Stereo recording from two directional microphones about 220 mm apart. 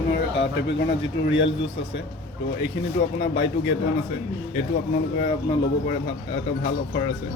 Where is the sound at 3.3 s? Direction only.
55° left (ahead or behind).